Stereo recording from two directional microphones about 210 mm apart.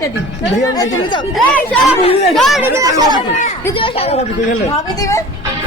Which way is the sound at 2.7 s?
15° right (ahead or behind).